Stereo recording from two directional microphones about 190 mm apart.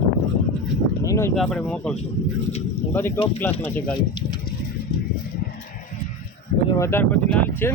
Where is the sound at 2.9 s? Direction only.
10° left (ahead or behind).